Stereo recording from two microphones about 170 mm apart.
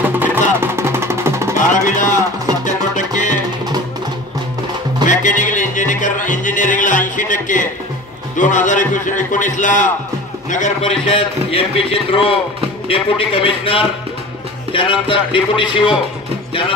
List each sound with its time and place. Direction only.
0.0 s music: 10° right (ahead or behind)
1.7 s a sound: 50° left (ahead or behind)
5.0 s music: 50° left (ahead or behind)
8.4 s speech: 45° left (ahead or behind)
10.8 s a man's voice: 30° left (ahead or behind)